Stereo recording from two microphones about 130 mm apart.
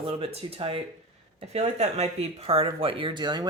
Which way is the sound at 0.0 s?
45° right (ahead or behind).